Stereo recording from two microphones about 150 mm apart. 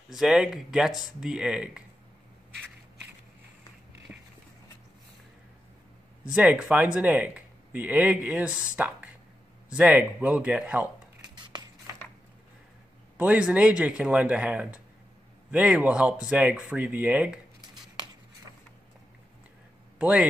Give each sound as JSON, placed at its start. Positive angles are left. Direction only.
{"t": 0.1, "sound": "speech", "side_deg": -5}
{"t": 4.1, "sound": "a sound", "side_deg": -5}
{"t": 6.3, "sound": "speech", "side_deg": -10}
{"t": 11.3, "sound": "music", "side_deg": -30}
{"t": 13.2, "sound": "speech", "side_deg": -10}
{"t": 17.6, "sound": "a sound", "side_deg": -25}
{"t": 20.0, "sound": "speech", "side_deg": -10}